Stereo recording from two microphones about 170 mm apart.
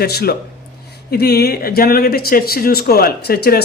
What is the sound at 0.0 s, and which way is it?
Speech, 70° left (ahead or behind).